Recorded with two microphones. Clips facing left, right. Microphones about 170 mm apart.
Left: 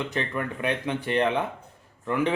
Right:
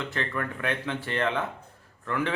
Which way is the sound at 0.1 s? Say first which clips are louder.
Left 2 dB; 15° left (ahead or behind).